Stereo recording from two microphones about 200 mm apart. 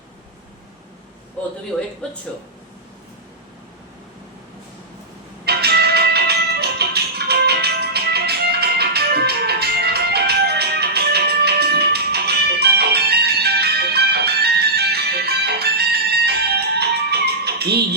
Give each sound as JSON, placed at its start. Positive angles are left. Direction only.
{"t": 5.5, "sound": "music", "side_deg": -55}